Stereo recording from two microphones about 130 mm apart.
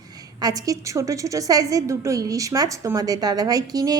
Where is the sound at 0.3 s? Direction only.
30° right (ahead or behind).